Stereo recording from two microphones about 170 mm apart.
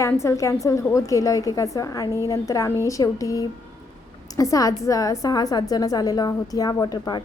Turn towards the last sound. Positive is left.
turn(degrees=25)  # may be behind; listen again after turning